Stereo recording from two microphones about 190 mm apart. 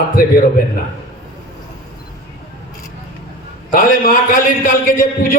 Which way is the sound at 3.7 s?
45° left (ahead or behind).